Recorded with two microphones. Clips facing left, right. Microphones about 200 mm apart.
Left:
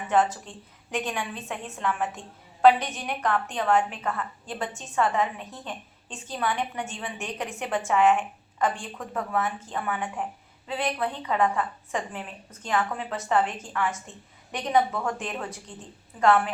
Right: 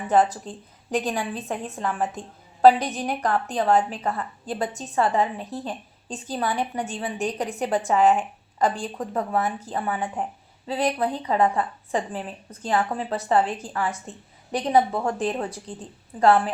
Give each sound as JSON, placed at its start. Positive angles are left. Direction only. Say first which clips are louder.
{"t": 0.1, "sound": "a woman's voice", "louder": "right 3 dB", "side_deg": -35}